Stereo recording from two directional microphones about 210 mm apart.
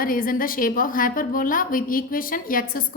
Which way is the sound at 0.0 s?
40° left (ahead or behind).